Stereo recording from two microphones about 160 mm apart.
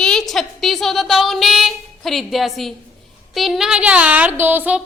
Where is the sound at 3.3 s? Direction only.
Centre (ahead or behind).